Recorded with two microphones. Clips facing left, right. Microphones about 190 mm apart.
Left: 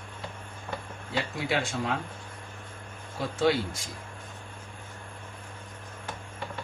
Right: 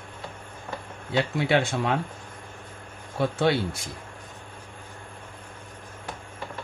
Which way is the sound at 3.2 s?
65° right (ahead or behind).